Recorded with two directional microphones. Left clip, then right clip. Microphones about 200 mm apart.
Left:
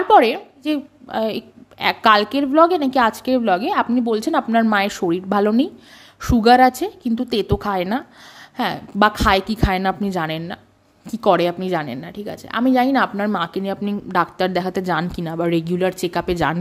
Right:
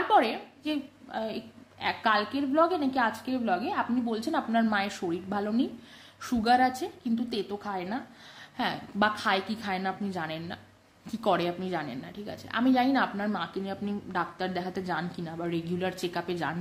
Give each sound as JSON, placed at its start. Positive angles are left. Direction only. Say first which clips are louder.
{"t": 0.1, "sound": "a woman's voice", "louder": "left 12 dB", "side_deg": 45}